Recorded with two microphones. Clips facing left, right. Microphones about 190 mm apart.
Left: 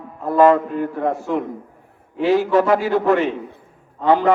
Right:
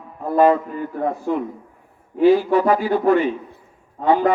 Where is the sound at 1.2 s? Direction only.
90° left.